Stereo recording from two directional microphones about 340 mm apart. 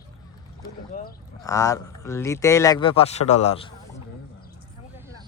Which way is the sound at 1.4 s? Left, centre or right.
Centre.